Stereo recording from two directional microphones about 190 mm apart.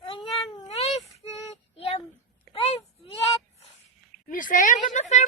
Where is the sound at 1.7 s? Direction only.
30° left (ahead or behind).